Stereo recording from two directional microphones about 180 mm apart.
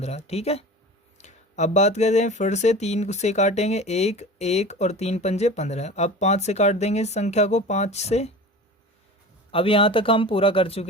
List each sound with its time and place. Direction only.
0.0 s speech: 35° left (ahead or behind)
9.5 s speech: 30° left (ahead or behind)